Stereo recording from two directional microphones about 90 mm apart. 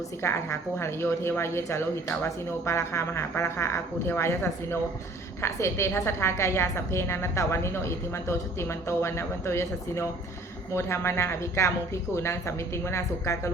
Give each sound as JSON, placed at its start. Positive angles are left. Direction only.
{"t": 0.2, "sound": "a woman's voice", "side_deg": 30}